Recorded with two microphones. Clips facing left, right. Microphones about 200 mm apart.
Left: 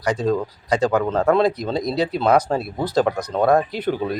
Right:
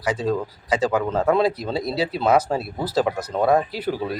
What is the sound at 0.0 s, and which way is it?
Speech, 5° right (ahead or behind).